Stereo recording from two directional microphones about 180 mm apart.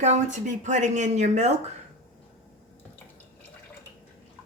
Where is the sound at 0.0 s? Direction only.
40° right (ahead or behind).